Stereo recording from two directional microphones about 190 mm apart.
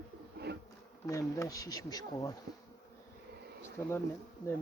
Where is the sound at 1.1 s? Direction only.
15° left (ahead or behind).